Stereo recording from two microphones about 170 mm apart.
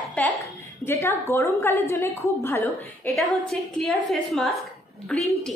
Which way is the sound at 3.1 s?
Centre (ahead or behind).